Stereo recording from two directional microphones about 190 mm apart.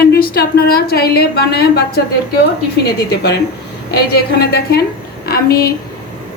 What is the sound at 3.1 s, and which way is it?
A woman's voice, 60° left (ahead or behind).